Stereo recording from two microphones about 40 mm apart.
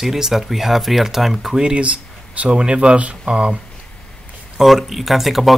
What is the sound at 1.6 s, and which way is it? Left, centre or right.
Speech, right.